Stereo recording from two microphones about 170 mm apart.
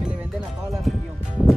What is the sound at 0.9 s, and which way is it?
Music, centre (ahead or behind).